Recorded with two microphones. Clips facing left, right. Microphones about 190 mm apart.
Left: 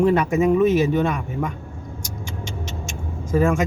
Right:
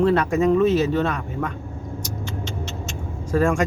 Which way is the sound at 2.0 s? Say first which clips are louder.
Right 1 dB; 10° left (ahead or behind).